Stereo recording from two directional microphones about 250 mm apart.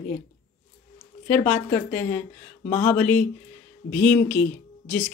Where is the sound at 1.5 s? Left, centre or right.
Centre.